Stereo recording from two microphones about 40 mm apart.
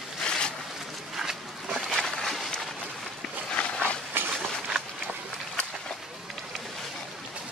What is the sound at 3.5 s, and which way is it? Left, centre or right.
Dog, left.